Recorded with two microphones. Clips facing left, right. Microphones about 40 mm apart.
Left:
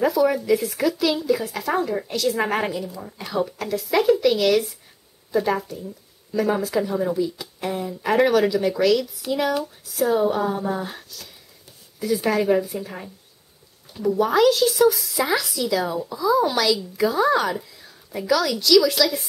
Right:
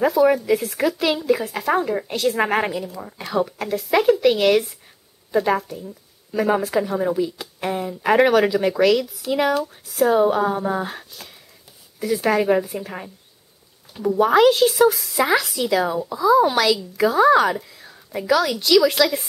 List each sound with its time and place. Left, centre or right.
0.0 s a woman's voice: centre
9.3 s speech: right
9.9 s a woman's voice: centre